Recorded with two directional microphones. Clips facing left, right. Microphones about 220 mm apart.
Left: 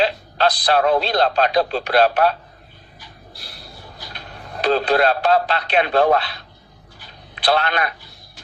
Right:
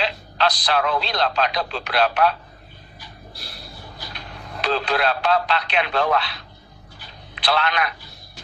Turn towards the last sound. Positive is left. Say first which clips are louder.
# left 3 dB
turn(degrees=40)  # may be behind; listen again after turning